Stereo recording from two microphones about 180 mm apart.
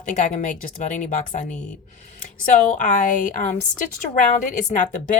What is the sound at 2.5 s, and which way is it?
A woman's voice, 45° left (ahead or behind).